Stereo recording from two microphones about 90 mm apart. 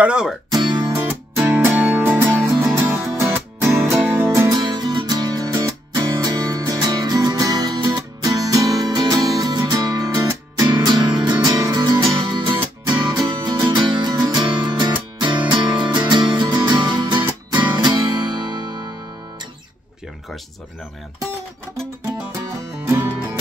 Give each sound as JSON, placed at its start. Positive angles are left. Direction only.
{"t": 0.0, "sound": "speech", "side_deg": -10}
{"t": 0.5, "sound": "music", "side_deg": -50}
{"t": 0.9, "sound": "music", "side_deg": -30}
{"t": 4.5, "sound": "music", "side_deg": -50}